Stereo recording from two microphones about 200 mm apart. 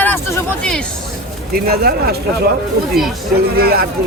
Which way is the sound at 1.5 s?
50° right (ahead or behind).